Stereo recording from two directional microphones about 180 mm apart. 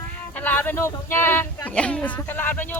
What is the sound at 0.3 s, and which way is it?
Speech, 10° left (ahead or behind).